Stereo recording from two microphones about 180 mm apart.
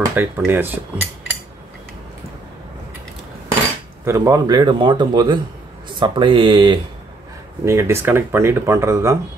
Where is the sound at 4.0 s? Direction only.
15° right (ahead or behind).